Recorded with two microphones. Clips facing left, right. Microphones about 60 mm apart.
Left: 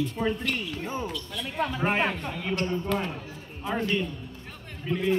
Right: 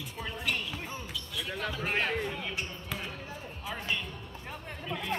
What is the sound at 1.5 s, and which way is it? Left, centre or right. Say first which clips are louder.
Speech: left 8 dB; left.